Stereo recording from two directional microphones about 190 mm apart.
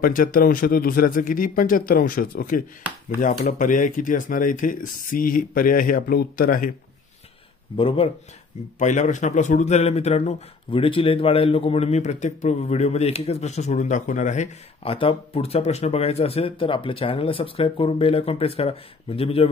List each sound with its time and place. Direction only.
0.0 s speech: 45° left (ahead or behind)
7.7 s speech: 30° left (ahead or behind)
8.7 s speech: 40° left (ahead or behind)